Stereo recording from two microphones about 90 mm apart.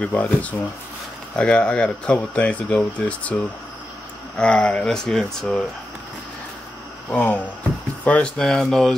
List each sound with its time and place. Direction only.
0.0 s speech: 15° left (ahead or behind)
4.4 s speech: 15° left (ahead or behind)
7.1 s speech: 15° left (ahead or behind)